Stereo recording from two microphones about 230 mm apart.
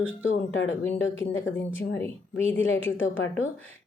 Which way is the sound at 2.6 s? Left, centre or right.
Left.